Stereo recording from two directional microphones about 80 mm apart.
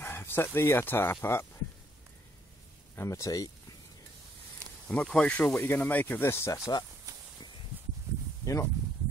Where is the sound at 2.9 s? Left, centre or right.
Left.